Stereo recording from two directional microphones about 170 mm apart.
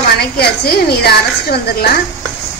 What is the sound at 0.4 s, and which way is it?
A woman's voice, 65° left (ahead or behind).